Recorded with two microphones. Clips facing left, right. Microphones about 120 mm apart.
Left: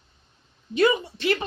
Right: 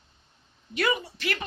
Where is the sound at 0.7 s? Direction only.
25° left (ahead or behind).